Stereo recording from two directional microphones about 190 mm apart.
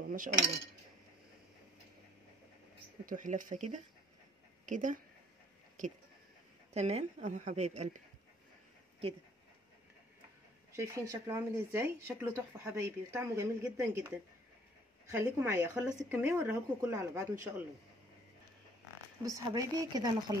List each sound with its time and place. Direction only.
0.0 s speech: 45° right (ahead or behind)
3.1 s a woman's voice: 40° right (ahead or behind)
6.7 s a woman's voice: 35° right (ahead or behind)
10.7 s speech: 15° right (ahead or behind)
19.2 s a woman's voice: 20° right (ahead or behind)